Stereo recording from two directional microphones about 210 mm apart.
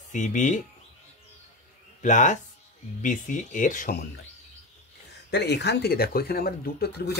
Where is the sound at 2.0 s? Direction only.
35° left (ahead or behind).